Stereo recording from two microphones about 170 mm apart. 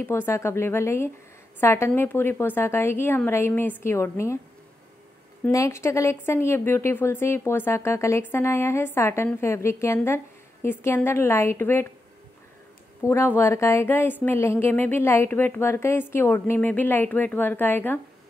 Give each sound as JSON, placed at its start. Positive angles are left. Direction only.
{"t": 0.0, "sound": "speech", "side_deg": 15}
{"t": 5.5, "sound": "speech", "side_deg": 15}
{"t": 13.0, "sound": "speech", "side_deg": 15}